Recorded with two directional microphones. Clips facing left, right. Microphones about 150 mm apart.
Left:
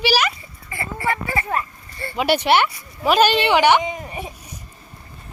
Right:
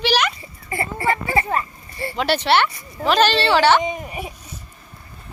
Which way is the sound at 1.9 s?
25° right (ahead or behind).